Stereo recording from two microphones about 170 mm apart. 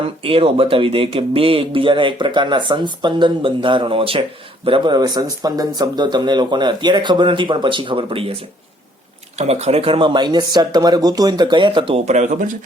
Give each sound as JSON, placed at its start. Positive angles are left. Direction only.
{"t": 0.0, "sound": "speech", "side_deg": -30}
{"t": 9.4, "sound": "speech", "side_deg": -40}